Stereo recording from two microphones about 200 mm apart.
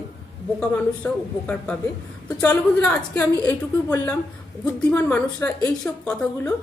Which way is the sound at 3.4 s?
20° left (ahead or behind).